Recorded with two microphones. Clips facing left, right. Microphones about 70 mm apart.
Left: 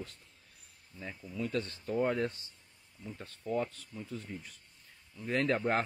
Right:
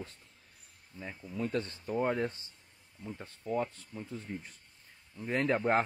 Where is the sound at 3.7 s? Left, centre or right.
Right.